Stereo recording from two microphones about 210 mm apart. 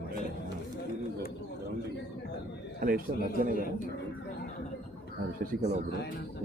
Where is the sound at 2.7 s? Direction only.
40° right (ahead or behind).